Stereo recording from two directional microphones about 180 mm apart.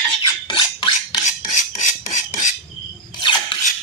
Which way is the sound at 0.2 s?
25° left (ahead or behind).